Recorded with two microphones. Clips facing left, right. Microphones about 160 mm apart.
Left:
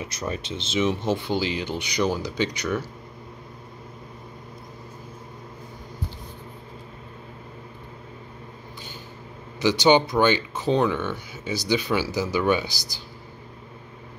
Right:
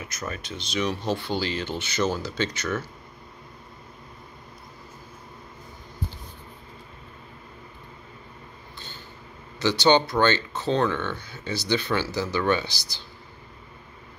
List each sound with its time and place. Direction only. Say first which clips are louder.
0.0 s speech: left 4 dB; 30° left (ahead or behind)
9.6 s speech: left 2 dB; 15° left (ahead or behind)